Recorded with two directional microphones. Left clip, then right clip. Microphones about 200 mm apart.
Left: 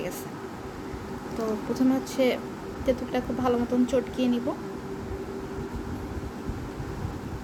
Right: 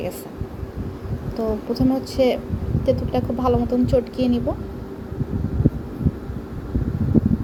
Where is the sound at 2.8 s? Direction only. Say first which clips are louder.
Right 6 dB; 10° right (ahead or behind).